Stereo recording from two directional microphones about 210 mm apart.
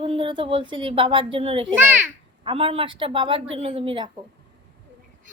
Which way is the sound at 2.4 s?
25° right (ahead or behind).